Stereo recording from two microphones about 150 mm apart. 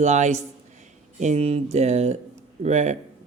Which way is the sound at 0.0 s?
50° right (ahead or behind).